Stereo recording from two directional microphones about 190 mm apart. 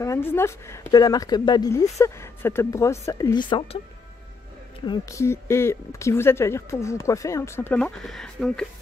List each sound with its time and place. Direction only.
0.0 s speech: 15° left (ahead or behind); by 3.8 s 30° left (ahead or behind)
4.8 s speech: 20° left (ahead or behind); by 8.6 s centre (ahead or behind)